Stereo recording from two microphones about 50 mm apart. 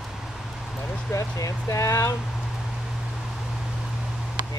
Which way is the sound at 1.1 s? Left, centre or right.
Left.